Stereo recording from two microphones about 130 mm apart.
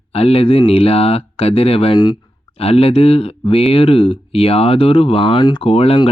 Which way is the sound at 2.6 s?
50° left (ahead or behind).